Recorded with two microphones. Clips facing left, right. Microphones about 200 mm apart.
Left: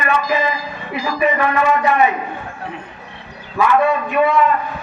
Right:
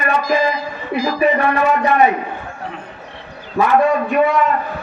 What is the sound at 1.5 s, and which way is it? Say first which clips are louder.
Speech: right 1 dB; 40° right (ahead or behind).